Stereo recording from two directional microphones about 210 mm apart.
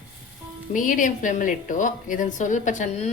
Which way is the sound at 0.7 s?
40° left (ahead or behind).